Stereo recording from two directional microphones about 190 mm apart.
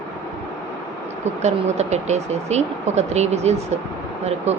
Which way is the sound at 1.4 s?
35° right (ahead or behind).